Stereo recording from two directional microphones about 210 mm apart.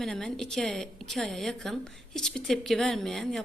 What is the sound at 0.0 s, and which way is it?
A woman's voice, centre (ahead or behind).